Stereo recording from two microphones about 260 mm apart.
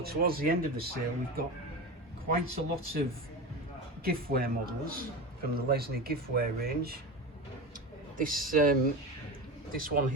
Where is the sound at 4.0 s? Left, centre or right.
Right.